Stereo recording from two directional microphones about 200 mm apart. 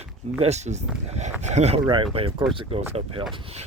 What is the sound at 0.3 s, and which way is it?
Speech, 35° right (ahead or behind).